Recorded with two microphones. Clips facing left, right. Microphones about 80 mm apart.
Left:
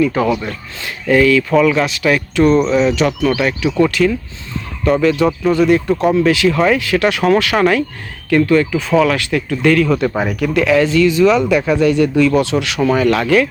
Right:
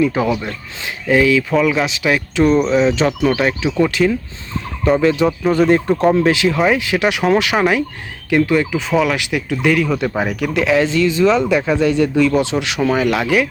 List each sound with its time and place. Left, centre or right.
0.0 s speech: centre
2.9 s speech: right
5.2 s speech: centre
5.5 s speech: right; by 13.5 s centre